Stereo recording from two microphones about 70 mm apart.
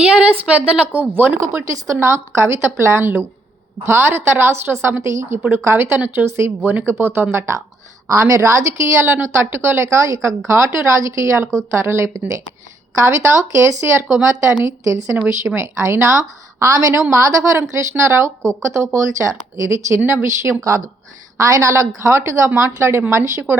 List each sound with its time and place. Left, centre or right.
0.2 s a woman's voice: centre
1.1 s speech: right
5.4 s speech: right
6.6 s a woman's voice: right
6.8 s speech: right